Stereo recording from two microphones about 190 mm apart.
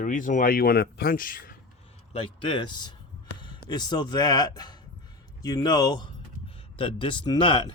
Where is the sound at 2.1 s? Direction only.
25° left (ahead or behind).